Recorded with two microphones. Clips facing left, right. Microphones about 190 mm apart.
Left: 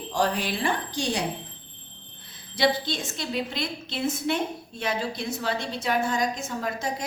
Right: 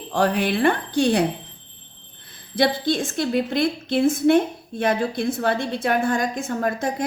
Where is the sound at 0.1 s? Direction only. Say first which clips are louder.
Right 6 dB; 60° right (ahead or behind).